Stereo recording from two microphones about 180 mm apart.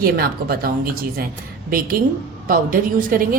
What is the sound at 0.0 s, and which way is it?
A woman's voice, 55° right (ahead or behind).